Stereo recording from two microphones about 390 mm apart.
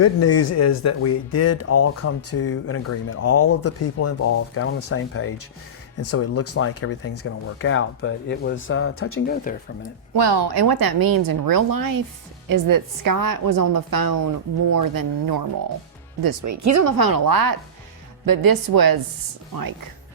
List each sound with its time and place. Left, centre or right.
0.0 s speech: left
10.2 s a woman's voice: right
16.2 s speech: right
17.0 s a woman's voice: right